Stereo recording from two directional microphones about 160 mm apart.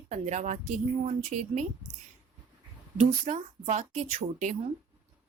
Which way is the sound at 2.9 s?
45° right (ahead or behind).